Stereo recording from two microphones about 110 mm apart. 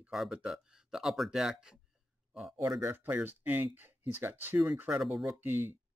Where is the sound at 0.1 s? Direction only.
5° right (ahead or behind).